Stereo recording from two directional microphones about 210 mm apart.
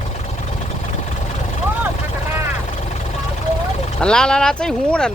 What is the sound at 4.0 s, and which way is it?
Speech, 5° left (ahead or behind).